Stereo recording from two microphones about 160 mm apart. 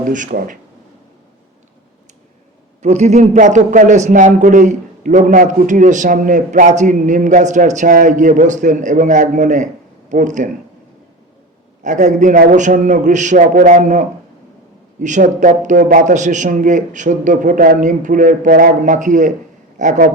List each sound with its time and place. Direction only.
0.1 s speech: 55° right (ahead or behind)
2.8 s a man's voice: 45° right (ahead or behind)
11.8 s a man's voice: 50° right (ahead or behind)
15.0 s a man's voice: 50° right (ahead or behind)